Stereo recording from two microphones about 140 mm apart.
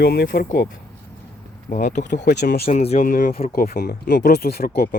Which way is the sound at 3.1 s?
80° left.